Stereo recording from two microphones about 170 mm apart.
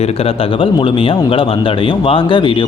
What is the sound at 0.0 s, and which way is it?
A man's voice, 35° left (ahead or behind).